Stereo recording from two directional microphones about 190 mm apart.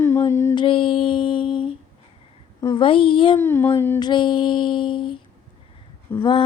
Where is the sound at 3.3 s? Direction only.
10° left (ahead or behind).